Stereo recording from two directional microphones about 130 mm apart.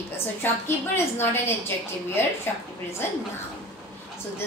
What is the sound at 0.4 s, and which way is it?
A woman's voice, 15° left (ahead or behind).